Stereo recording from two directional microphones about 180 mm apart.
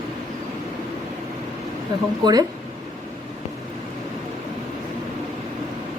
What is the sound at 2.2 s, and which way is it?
Speech, 20° right (ahead or behind).